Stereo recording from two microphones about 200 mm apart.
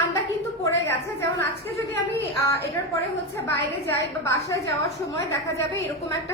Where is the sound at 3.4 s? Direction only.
10° left (ahead or behind).